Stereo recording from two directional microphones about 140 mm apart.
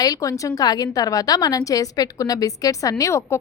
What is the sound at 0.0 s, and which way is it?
Speech, 25° left (ahead or behind).